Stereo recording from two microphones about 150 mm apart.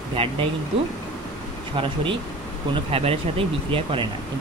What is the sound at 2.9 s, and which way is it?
Speech, 40° right (ahead or behind).